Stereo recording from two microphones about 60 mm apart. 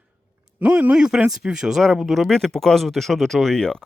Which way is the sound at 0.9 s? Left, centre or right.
Centre.